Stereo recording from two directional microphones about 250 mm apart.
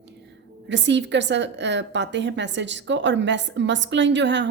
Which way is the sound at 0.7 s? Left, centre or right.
Right.